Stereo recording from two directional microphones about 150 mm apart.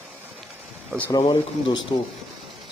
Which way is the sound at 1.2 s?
35° left (ahead or behind).